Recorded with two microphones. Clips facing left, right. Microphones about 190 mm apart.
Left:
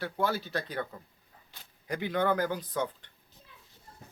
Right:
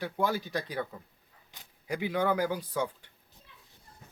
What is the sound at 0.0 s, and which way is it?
Speech, 15° right (ahead or behind).